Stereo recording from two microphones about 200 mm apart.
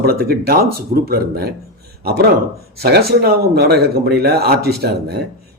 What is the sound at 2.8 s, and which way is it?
A man's voice, 50° right (ahead or behind).